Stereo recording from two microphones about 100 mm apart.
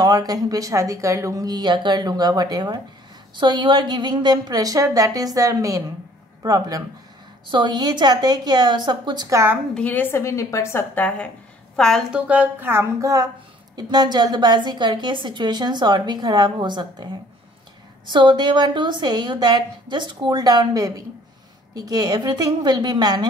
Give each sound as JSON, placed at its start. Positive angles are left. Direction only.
{"t": 0.0, "sound": "speech", "side_deg": -40}
{"t": 7.5, "sound": "a woman's voice", "side_deg": -45}
{"t": 9.3, "sound": "speech", "side_deg": -25}
{"t": 9.8, "sound": "a woman's voice", "side_deg": 15}
{"t": 10.2, "sound": "a woman's voice", "side_deg": 30}
{"t": 11.1, "sound": "a woman's voice", "side_deg": 10}
{"t": 12.1, "sound": "speech", "side_deg": -15}
{"t": 13.7, "sound": "a woman's voice", "side_deg": -45}